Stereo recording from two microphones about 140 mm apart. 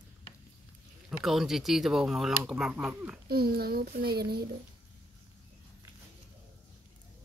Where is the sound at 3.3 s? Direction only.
90° right.